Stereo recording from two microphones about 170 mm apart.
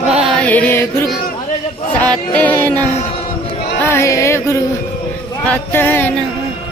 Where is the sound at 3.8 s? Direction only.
15° left (ahead or behind).